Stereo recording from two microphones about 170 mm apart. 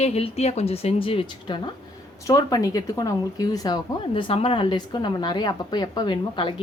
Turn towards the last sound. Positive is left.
turn(degrees=25)  # may be behind; listen again after turning